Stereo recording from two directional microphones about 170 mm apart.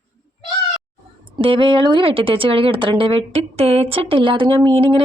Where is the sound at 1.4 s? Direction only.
30° right (ahead or behind).